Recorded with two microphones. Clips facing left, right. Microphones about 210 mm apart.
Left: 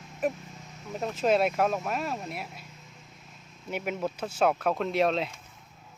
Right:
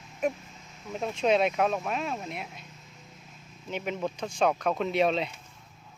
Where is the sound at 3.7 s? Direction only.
5° left (ahead or behind).